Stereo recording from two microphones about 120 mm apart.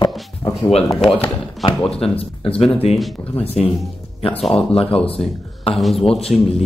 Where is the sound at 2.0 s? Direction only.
55° left (ahead or behind).